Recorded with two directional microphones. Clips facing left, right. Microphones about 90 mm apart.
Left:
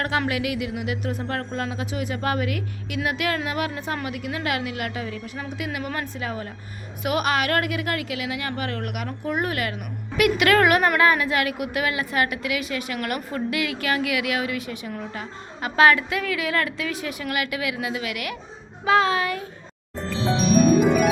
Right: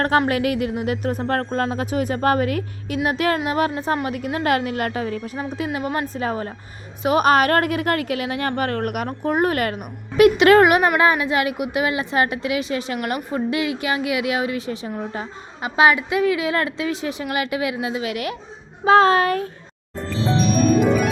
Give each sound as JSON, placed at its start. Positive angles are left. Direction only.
{"t": 0.3, "sound": "a woman's voice", "side_deg": -40}
{"t": 10.2, "sound": "a woman's voice", "side_deg": -25}
{"t": 18.9, "sound": "a woman's voice", "side_deg": -40}
{"t": 20.1, "sound": "music", "side_deg": 15}